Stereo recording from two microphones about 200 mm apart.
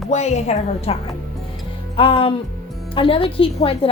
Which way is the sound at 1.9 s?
25° left (ahead or behind).